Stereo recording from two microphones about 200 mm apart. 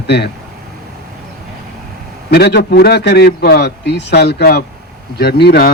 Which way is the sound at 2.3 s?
55° left (ahead or behind).